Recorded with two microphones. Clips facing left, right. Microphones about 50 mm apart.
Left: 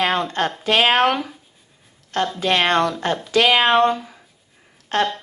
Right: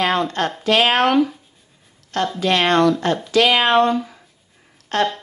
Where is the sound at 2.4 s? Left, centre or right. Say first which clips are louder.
Right 3 dB; left.